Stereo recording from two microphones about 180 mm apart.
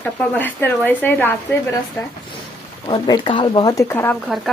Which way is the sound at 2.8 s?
25° left (ahead or behind).